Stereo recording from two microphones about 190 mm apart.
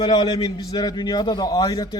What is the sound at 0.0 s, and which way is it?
A man's voice, 20° left (ahead or behind).